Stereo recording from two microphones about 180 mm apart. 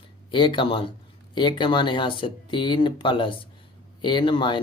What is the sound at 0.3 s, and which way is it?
Speech, 25° left (ahead or behind).